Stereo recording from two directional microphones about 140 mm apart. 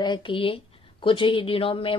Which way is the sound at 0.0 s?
35° left (ahead or behind).